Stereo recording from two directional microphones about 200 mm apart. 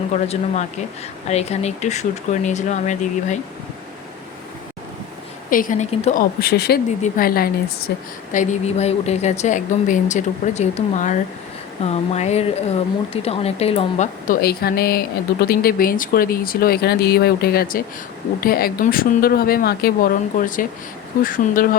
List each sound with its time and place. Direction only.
0.1 s speech: 35° left (ahead or behind)
5.5 s speech: 45° left (ahead or behind)
6.1 s speech: 50° left (ahead or behind)
8.3 s speech: 35° left (ahead or behind)
14.3 s speech: 50° left (ahead or behind)